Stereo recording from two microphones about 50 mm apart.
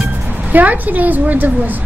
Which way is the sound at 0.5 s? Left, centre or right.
Right.